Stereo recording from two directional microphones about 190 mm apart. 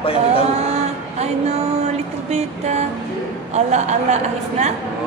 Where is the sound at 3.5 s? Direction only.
35° right (ahead or behind).